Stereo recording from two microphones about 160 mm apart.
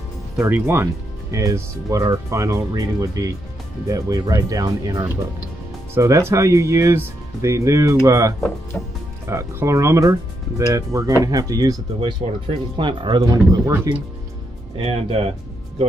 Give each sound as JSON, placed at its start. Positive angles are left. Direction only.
{"t": 0.4, "sound": "speech", "side_deg": -15}
{"t": 8.7, "sound": "speech", "side_deg": 15}
{"t": 9.2, "sound": "speech", "side_deg": -20}
{"t": 13.5, "sound": "speech", "side_deg": -15}
{"t": 14.8, "sound": "speech", "side_deg": -35}